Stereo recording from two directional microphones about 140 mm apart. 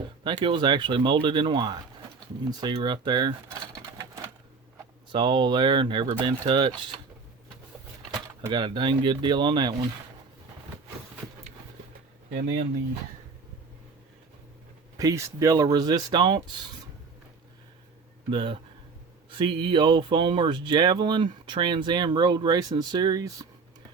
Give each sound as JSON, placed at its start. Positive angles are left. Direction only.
{"t": 0.3, "sound": "speech", "side_deg": -35}
{"t": 5.1, "sound": "speech", "side_deg": -35}
{"t": 8.5, "sound": "speech", "side_deg": -35}
{"t": 14.9, "sound": "speech", "side_deg": -25}
{"t": 18.3, "sound": "speech", "side_deg": -35}